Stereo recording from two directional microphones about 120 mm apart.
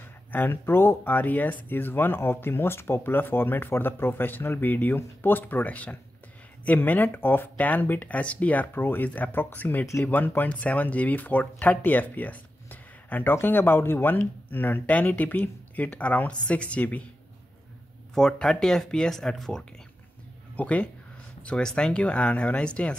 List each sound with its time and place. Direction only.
0.3 s speech: 15° left (ahead or behind)
18.1 s speech: 5° left (ahead or behind)